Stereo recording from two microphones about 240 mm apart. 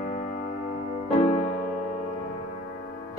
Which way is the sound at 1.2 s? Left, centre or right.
Left.